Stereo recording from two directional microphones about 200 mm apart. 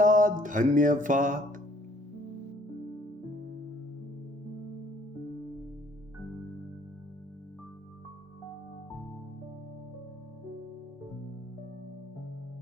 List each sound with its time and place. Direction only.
0.0 s music: 40° right (ahead or behind)